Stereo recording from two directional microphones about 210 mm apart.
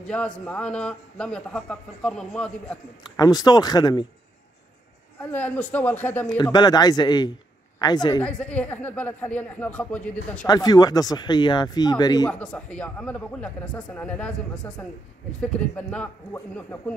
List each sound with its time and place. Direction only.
0.0 s a man's voice: 5° left (ahead or behind)
3.0 s speech: 20° left (ahead or behind)
5.2 s speech: 5° left (ahead or behind)
8.2 s speech: 5° left (ahead or behind)
10.4 s speech: 20° left (ahead or behind)
12.3 s a man's voice: 5° left (ahead or behind)